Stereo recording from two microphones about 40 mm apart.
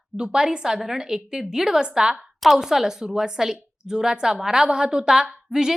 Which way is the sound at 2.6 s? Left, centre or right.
Centre.